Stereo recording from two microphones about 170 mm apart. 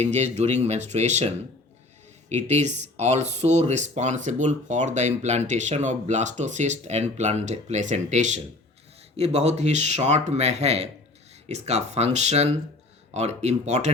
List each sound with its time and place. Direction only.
0.0 s speech: 40° right (ahead or behind)
2.3 s speech: 40° right (ahead or behind)